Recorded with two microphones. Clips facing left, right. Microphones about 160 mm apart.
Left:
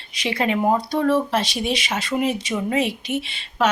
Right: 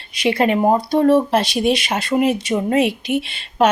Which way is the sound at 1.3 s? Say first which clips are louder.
Right 6 dB; 55° right (ahead or behind).